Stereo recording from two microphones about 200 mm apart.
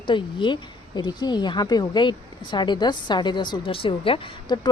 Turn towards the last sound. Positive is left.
turn(degrees=25)  # may be behind; listen again after turning